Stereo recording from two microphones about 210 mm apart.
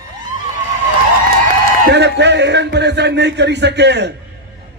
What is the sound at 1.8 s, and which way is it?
A man's voice, 55° right (ahead or behind).